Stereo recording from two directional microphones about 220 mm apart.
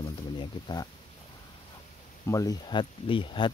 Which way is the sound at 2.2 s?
15° left (ahead or behind).